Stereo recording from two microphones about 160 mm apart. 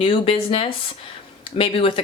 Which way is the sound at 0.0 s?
35° left (ahead or behind).